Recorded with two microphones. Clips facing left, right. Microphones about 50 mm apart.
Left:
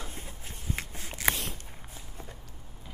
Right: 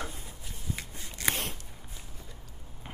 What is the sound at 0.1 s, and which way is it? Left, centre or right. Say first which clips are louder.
Shuffling cards: left 2 dB; left.